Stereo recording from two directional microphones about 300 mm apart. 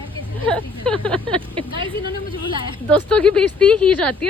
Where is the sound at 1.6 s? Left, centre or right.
Centre.